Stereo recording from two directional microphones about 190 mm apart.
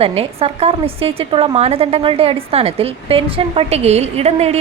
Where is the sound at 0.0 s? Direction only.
30° right (ahead or behind).